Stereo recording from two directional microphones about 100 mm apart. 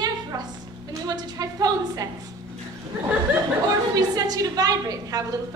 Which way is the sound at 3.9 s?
40° right (ahead or behind).